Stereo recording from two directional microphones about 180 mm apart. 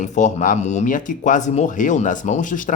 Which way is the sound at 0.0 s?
40° left (ahead or behind).